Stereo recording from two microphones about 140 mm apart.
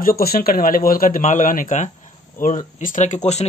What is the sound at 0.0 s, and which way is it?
Speech, 90° left.